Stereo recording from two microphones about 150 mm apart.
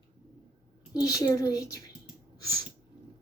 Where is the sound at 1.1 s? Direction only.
25° left (ahead or behind).